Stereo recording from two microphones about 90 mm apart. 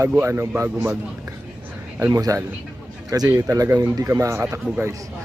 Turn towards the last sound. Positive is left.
turn(degrees=-10)  # may be behind; listen again after turning